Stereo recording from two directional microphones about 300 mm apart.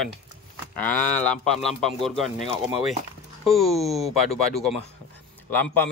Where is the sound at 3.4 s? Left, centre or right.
Centre.